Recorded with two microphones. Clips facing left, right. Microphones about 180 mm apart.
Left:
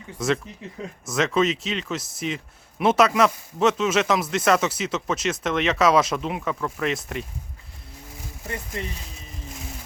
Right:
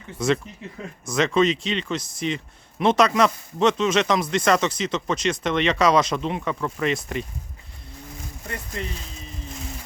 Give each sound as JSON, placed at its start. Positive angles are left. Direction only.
{"t": 0.2, "sound": "speech", "side_deg": 0}
{"t": 8.4, "sound": "speech", "side_deg": 15}